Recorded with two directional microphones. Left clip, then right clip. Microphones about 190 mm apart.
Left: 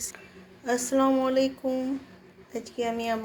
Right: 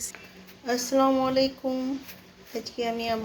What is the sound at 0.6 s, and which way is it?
A woman's voice, centre (ahead or behind).